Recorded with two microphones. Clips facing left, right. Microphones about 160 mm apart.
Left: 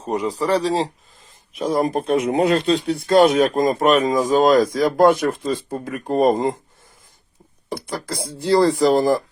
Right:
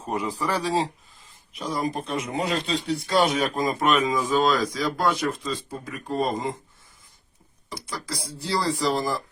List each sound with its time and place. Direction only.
0.1 s speech: 35° left (ahead or behind)
1.5 s speech: 50° left (ahead or behind)
7.7 s speech: 55° left (ahead or behind)